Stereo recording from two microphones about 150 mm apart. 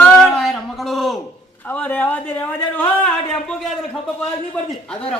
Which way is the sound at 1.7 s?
10° left (ahead or behind).